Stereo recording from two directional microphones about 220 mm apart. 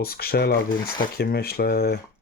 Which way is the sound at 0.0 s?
45° left (ahead or behind).